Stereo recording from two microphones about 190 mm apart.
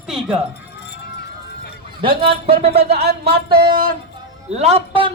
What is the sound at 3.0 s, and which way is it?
Speech, 55° right (ahead or behind).